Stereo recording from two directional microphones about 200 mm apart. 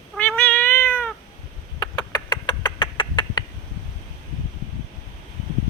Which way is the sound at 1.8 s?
20° left (ahead or behind).